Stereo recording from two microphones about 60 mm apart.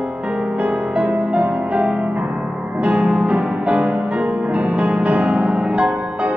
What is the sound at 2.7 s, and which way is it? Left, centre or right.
Music, centre.